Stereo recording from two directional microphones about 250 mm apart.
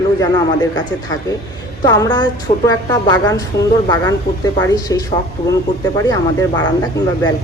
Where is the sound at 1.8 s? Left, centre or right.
Centre.